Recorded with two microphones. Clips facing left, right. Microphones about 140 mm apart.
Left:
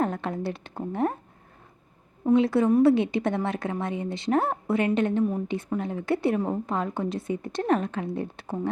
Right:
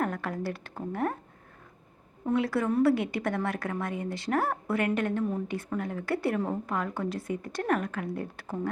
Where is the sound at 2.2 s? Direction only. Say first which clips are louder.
Left 6 dB; 20° left (ahead or behind).